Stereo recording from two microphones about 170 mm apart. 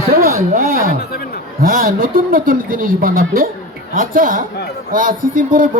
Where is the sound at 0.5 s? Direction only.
55° right (ahead or behind).